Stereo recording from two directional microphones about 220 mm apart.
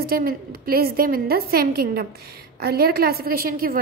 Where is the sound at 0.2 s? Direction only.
40° right (ahead or behind).